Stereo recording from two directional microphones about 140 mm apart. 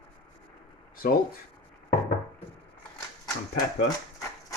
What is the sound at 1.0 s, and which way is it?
Speech, 85° left.